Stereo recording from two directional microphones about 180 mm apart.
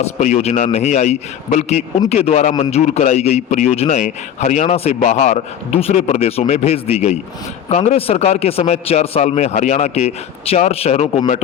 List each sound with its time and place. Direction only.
0.0 s a man's voice: 40° left (ahead or behind)